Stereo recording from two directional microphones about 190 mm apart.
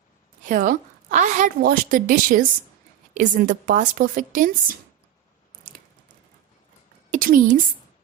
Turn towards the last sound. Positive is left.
turn(degrees=-45)  # may be behind; listen again after turning